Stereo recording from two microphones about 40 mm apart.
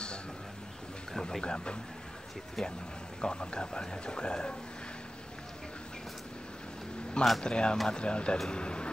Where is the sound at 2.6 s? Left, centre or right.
Centre.